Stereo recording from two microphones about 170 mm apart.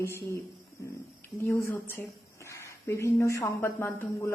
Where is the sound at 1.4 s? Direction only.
15° left (ahead or behind).